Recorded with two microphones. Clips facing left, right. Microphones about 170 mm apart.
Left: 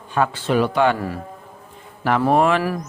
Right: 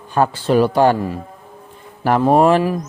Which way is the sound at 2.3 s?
35° right (ahead or behind).